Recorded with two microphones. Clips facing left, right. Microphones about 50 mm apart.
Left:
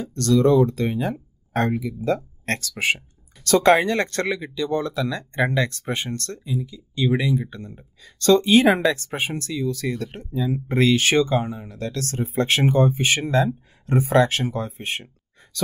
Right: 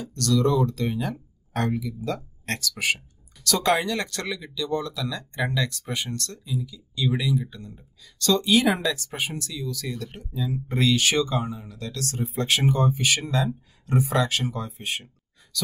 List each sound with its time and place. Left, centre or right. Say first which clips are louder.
0.0 s speech: left 5 dB; left